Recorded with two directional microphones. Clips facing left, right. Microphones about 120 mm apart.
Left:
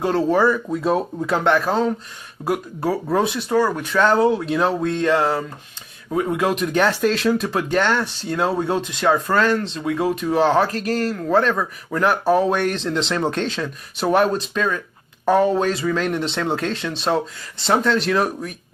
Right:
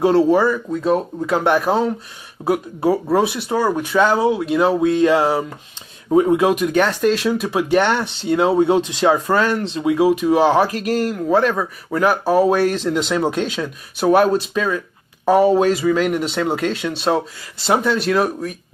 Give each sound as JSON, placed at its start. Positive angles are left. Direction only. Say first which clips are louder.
{"t": 0.0, "sound": "speech", "louder": "right 6 dB", "side_deg": -15}
{"t": 0.3, "sound": "speech", "louder": "right 2 dB", "side_deg": 0}
{"t": 1.5, "sound": "speech", "louder": "right 1 dB", "side_deg": -15}
{"t": 2.4, "sound": "speech", "louder": "right 4 dB", "side_deg": 0}
{"t": 6.6, "sound": "speech", "louder": "right 2 dB", "side_deg": 0}